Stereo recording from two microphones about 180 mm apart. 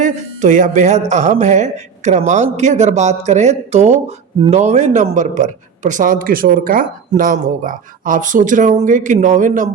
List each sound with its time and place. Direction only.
0.0 s a man's voice: 45° right (ahead or behind)